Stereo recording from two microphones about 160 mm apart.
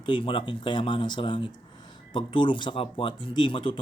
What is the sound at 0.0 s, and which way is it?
Speech, 30° left (ahead or behind).